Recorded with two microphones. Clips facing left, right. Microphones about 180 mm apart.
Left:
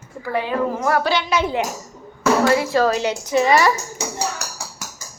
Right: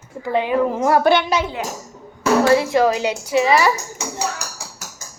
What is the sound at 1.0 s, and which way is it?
Speech, 55° right (ahead or behind).